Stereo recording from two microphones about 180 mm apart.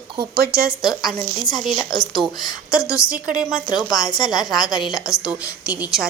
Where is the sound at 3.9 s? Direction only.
20° left (ahead or behind).